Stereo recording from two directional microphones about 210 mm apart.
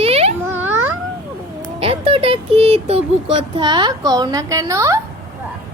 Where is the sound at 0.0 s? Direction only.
30° right (ahead or behind).